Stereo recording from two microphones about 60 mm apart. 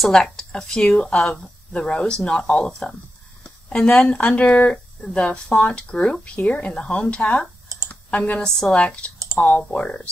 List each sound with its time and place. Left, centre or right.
0.1 s speech: centre
3.4 s a sound: left
4.0 s speech: centre
7.9 s computer keyboard: left
8.5 s speech: centre